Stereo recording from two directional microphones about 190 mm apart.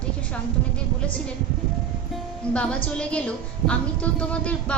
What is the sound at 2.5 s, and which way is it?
A woman's voice, 5° left (ahead or behind).